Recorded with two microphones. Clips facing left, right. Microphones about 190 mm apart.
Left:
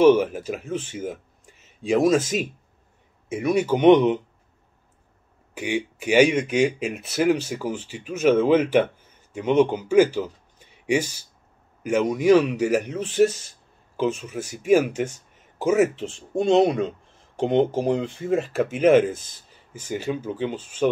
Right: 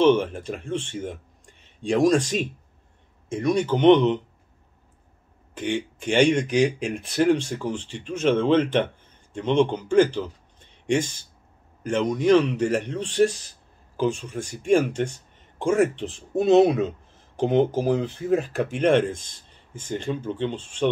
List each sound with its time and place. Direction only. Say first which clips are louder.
0.0 s speech: left 3 dB; 5° left (ahead or behind)
5.5 s speech: even; 10° left (ahead or behind)